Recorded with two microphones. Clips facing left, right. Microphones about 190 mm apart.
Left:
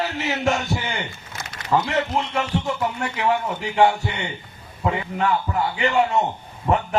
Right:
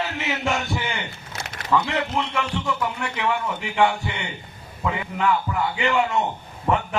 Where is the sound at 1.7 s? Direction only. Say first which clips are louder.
Left 1 dB; 40° left (ahead or behind).